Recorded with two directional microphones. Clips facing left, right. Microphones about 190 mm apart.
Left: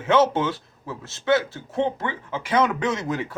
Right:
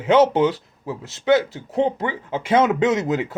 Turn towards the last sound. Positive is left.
turn(degrees=-20)  # may be behind; listen again after turning